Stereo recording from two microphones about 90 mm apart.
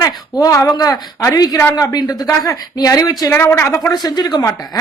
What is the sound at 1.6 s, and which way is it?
Speech, 35° left (ahead or behind).